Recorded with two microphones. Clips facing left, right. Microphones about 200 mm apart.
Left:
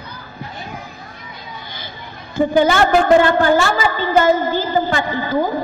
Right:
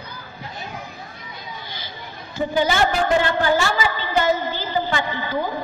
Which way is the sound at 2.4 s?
55° left (ahead or behind).